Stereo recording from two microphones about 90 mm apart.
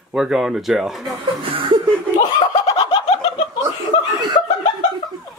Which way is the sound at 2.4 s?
70° left (ahead or behind).